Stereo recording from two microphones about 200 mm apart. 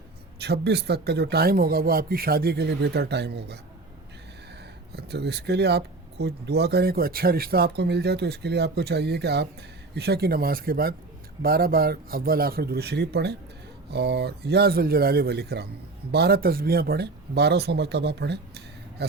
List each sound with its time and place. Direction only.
0.3 s a man's voice: 55° right (ahead or behind)
4.9 s a man's voice: 55° right (ahead or behind)